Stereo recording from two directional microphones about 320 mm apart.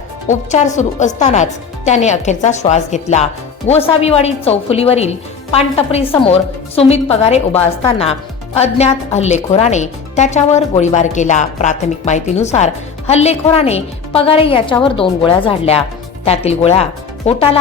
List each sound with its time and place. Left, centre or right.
0.3 s speech: left